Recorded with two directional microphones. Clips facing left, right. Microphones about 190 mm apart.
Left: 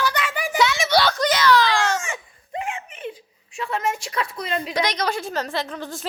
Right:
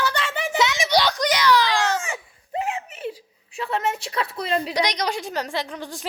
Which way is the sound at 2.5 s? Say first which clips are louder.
Right 3 dB; 35° right (ahead or behind).